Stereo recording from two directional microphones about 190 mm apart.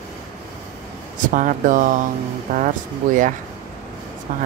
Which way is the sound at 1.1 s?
45° right (ahead or behind).